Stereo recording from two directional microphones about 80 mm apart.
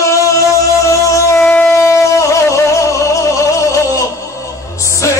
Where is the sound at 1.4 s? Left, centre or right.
Centre.